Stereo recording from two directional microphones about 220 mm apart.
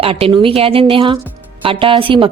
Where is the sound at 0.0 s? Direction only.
25° right (ahead or behind).